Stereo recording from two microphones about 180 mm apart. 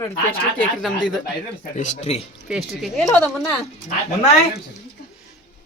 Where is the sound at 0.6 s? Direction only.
5° left (ahead or behind).